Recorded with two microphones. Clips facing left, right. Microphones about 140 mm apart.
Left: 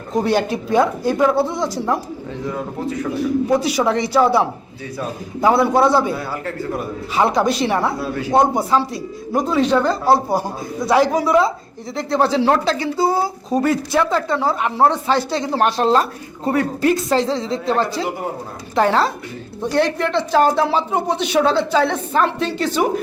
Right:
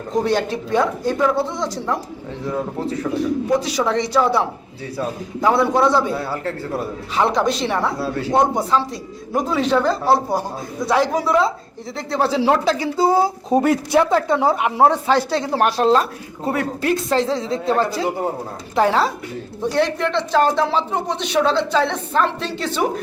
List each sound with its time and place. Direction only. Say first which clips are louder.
0.3 s speech: left 2 dB; 10° left (ahead or behind)
3.5 s speech: left 1 dB; 5° left (ahead or behind)
6.4 s a man's voice: even; 30° right (ahead or behind)
7.2 s speech: left 2 dB; 5° left (ahead or behind)